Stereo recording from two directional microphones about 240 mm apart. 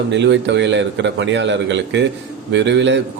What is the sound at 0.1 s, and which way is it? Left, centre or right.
A man's voice, right.